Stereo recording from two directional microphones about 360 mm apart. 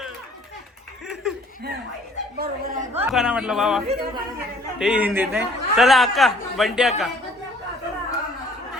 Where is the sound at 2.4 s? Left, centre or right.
Right.